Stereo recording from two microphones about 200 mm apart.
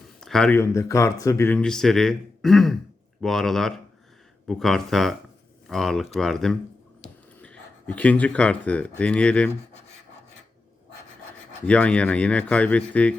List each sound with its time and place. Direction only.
0.2 s speech: centre (ahead or behind)
11.6 s speech: 5° left (ahead or behind)